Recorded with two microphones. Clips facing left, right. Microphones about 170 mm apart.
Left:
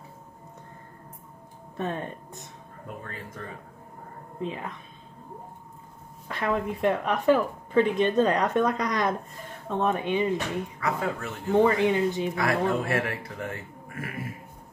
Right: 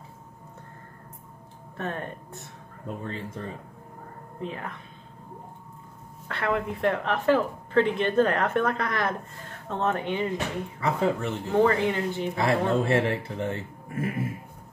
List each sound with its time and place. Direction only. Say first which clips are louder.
1.8 s speech: left 2 dB; 15° left (ahead or behind)
3.0 s speech: right 6 dB; 25° right (ahead or behind)
4.4 s speech: left 2 dB; 15° left (ahead or behind)
6.2 s speech: even; 15° left (ahead or behind)
10.8 s speech: right 6 dB; 25° right (ahead or behind)
11.5 s speech: left 1 dB; 15° left (ahead or behind)
12.4 s speech: right 4 dB; 25° right (ahead or behind)